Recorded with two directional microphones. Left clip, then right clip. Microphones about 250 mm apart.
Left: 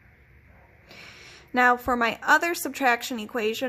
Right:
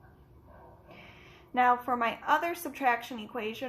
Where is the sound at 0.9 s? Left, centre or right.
Left.